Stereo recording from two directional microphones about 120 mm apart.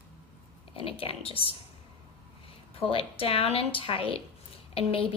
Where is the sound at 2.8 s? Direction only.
50° left (ahead or behind).